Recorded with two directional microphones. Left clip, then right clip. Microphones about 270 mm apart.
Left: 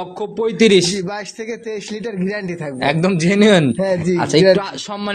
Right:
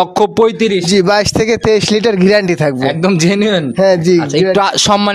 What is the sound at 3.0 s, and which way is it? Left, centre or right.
Speech, right.